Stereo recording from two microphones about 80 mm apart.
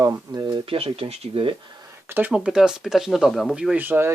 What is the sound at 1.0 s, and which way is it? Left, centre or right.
Speech, right.